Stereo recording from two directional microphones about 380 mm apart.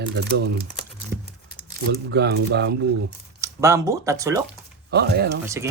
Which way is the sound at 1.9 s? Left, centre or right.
Right.